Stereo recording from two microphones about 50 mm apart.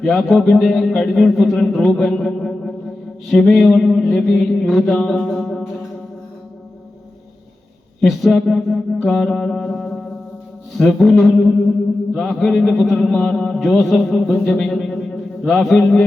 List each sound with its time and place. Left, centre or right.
0.0 s a man's voice: centre
2.2 s a sound: centre
3.2 s a man's voice: centre
8.3 s a man's voice: centre